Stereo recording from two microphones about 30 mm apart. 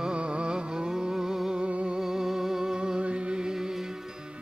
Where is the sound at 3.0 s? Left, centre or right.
Right.